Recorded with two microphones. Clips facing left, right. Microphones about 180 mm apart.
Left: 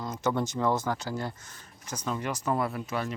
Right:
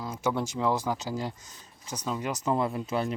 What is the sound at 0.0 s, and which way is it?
Speech, 5° right (ahead or behind).